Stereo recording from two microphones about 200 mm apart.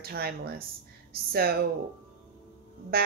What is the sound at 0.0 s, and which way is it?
Speech, 50° right (ahead or behind).